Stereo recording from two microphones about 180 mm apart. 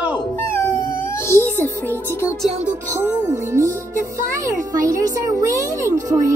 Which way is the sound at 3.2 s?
15° right (ahead or behind).